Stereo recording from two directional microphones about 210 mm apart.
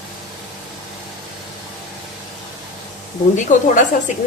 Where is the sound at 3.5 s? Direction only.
35° left (ahead or behind).